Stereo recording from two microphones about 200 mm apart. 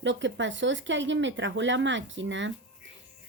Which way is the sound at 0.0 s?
65° right (ahead or behind).